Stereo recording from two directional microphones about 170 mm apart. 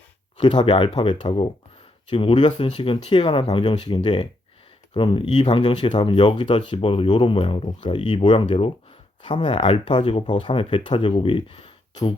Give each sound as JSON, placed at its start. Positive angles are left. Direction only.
{"t": 0.4, "sound": "speech", "side_deg": 25}